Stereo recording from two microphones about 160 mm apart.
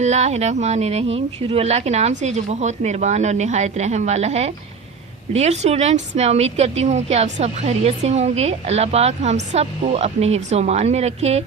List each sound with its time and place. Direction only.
0.0 s a woman's voice: 45° right (ahead or behind)